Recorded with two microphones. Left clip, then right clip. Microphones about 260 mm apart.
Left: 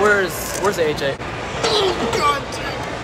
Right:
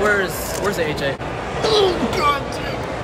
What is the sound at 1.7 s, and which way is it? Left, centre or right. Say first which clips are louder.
Speech: right 1 dB; right.